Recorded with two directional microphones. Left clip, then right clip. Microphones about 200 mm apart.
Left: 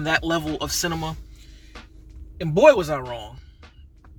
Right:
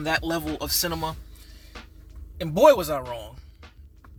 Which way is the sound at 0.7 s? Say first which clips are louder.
Right 1 dB; 10° right (ahead or behind).